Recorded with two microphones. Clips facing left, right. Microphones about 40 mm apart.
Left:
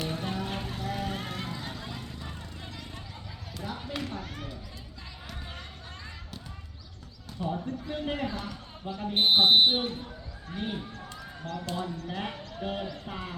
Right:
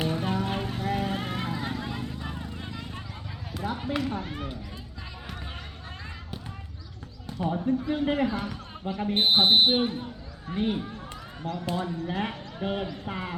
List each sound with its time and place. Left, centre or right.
0.1 s vehicle: centre
3.5 s run: right
7.4 s speech: right
9.1 s speech: centre